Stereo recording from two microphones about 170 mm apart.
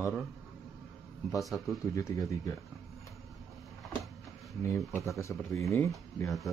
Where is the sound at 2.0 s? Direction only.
20° left (ahead or behind).